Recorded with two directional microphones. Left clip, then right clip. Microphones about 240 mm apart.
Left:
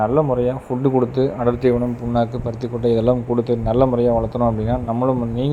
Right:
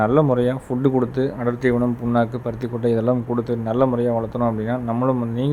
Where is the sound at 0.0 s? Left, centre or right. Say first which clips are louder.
Even; centre.